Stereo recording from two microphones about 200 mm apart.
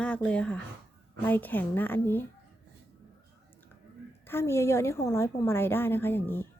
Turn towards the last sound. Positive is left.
turn(degrees=10)  # may be behind; listen again after turning